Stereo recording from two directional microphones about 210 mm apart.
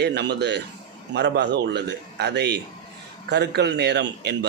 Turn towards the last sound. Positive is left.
turn(degrees=-55)  # may be behind; listen again after turning